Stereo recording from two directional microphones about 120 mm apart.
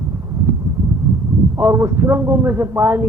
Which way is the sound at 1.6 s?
20° right (ahead or behind).